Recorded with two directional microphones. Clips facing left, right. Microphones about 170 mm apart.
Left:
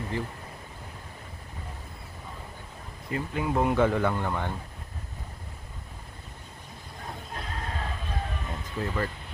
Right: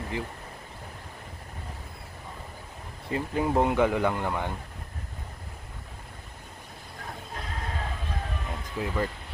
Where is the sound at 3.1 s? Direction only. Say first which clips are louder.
Right 3 dB; 25° right (ahead or behind).